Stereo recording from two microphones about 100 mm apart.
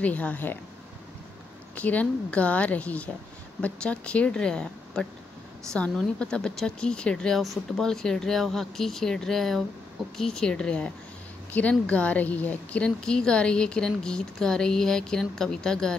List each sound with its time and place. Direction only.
0.0 s a woman's voice: 15° left (ahead or behind)
1.8 s a woman's voice: 15° left (ahead or behind)